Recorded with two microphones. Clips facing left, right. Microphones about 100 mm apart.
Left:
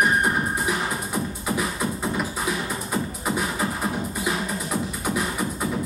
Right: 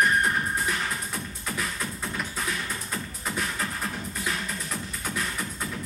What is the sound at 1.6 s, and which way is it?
Music, 10° left (ahead or behind).